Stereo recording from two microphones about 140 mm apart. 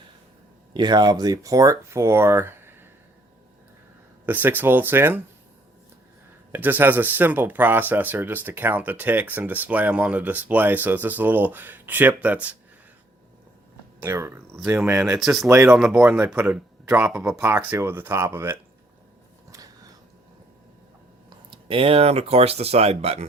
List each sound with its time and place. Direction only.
0.7 s speech: 30° right (ahead or behind)
4.3 s speech: 15° right (ahead or behind)
6.5 s speech: 15° right (ahead or behind)
14.0 s speech: 20° right (ahead or behind)
15.2 s speech: centre (ahead or behind)
15.4 s speech: 20° right (ahead or behind)
19.5 s a sound: 25° right (ahead or behind)
21.2 s speech: 40° right (ahead or behind)